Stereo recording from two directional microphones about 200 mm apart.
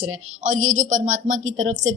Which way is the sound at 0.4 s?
40° right (ahead or behind).